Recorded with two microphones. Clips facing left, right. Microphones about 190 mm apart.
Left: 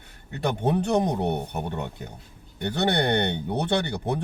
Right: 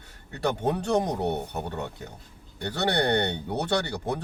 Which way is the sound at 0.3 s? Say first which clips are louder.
Left 1 dB; 20° left (ahead or behind).